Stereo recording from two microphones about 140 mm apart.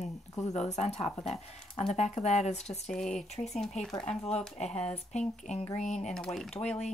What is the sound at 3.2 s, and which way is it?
Speech, 50° left (ahead or behind).